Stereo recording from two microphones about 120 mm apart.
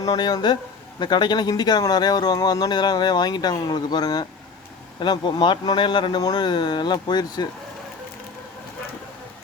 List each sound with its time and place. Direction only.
0.0 s a man's voice: 30° left (ahead or behind)